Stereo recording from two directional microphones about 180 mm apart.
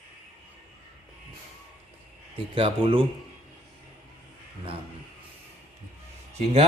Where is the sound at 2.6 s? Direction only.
30° right (ahead or behind).